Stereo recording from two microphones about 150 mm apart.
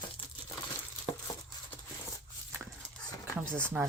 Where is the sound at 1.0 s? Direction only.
30° left (ahead or behind).